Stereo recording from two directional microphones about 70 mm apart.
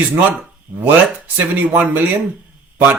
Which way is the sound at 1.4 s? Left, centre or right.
Right.